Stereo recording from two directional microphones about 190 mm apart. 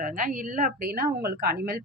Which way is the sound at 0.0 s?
45° right (ahead or behind).